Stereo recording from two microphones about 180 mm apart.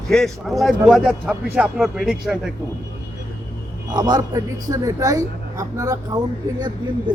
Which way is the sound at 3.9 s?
20° right (ahead or behind).